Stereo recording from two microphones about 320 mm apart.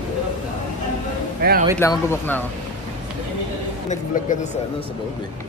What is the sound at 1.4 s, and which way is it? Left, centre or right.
Speech, right.